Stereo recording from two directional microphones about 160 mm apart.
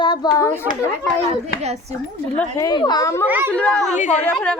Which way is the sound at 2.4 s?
20° left (ahead or behind).